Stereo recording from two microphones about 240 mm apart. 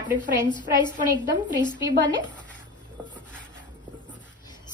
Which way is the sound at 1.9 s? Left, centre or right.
Right.